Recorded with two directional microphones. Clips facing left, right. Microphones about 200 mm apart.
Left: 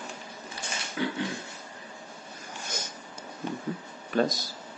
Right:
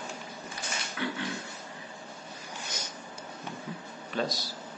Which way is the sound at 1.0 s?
30° left (ahead or behind).